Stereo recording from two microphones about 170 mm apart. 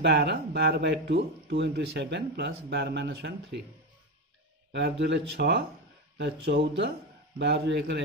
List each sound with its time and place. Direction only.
0.0 s speech: 75° right (ahead or behind)
4.7 s speech: 90° right; by 8.0 s 75° right (ahead or behind)